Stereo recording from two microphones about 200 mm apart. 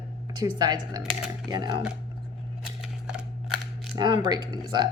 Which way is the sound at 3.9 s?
20° right (ahead or behind).